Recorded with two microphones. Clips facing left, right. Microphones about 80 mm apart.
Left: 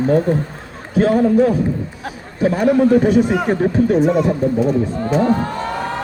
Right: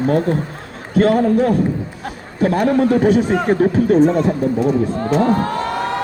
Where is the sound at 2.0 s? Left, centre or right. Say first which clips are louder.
Even; centre.